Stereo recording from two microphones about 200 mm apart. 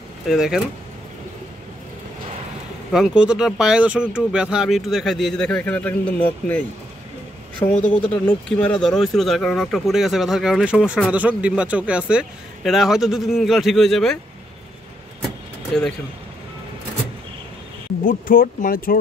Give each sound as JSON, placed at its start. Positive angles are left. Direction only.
{"t": 0.3, "sound": "speech", "side_deg": 0}
{"t": 2.9, "sound": "speech", "side_deg": -5}
{"t": 7.8, "sound": "speech", "side_deg": 5}
{"t": 15.2, "sound": "vehicle", "side_deg": 0}
{"t": 18.0, "sound": "speech", "side_deg": 45}